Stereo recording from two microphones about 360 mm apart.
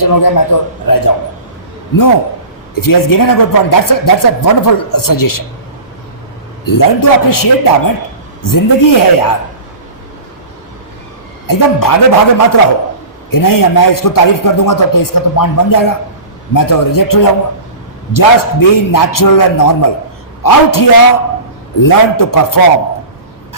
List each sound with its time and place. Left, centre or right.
0.0 s a man's voice: left
2.7 s a man's voice: left
6.7 s a man's voice: left
11.4 s a man's voice: left